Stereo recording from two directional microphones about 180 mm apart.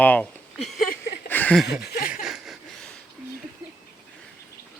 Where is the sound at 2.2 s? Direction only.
Centre (ahead or behind).